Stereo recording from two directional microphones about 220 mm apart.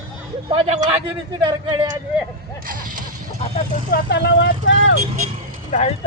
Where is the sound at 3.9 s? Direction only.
50° left (ahead or behind).